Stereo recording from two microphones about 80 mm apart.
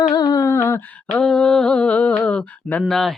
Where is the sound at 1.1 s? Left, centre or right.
Centre.